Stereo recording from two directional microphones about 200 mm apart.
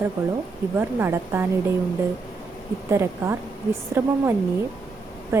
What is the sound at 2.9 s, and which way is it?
A woman's voice, 15° right (ahead or behind).